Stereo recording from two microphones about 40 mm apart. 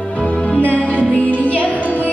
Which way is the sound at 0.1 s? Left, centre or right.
Left.